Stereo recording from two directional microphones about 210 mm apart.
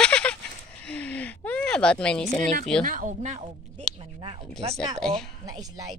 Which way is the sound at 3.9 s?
25° right (ahead or behind).